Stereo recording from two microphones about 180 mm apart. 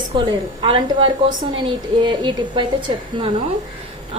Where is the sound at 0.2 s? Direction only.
25° right (ahead or behind).